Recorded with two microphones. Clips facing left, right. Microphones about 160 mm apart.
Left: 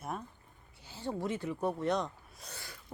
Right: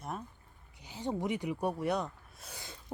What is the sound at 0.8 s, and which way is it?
Speech, 15° right (ahead or behind).